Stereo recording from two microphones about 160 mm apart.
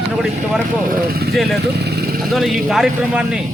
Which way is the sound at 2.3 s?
Centre (ahead or behind).